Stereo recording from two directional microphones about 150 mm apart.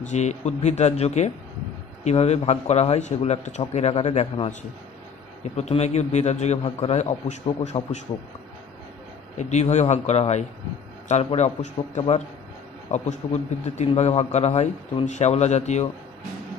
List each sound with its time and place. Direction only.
0.0 s a man's voice: 50° left (ahead or behind)
9.4 s a man's voice: 50° left (ahead or behind)